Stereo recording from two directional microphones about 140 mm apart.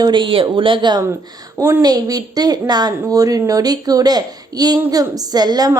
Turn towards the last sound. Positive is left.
turn(degrees=-30)  # may be behind; listen again after turning